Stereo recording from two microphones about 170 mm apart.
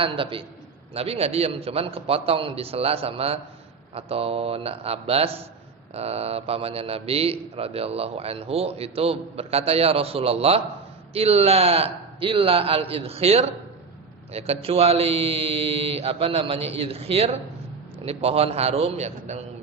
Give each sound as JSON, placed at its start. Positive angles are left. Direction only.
{"t": 0.0, "sound": "a man's voice", "side_deg": -30}